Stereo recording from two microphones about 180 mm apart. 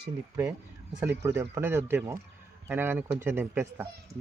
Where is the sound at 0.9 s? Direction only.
15° right (ahead or behind).